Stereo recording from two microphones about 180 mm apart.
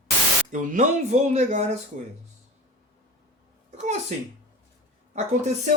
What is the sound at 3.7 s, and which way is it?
Speech, 40° right (ahead or behind).